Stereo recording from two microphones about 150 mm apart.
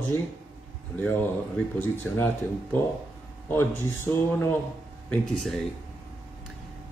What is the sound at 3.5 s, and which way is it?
A man's voice, 15° left (ahead or behind).